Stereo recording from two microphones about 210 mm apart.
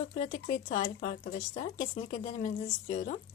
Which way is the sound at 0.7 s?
45° left (ahead or behind).